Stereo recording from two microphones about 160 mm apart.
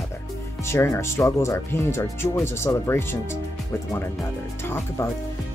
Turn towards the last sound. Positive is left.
turn(degrees=15)  # may be behind; listen again after turning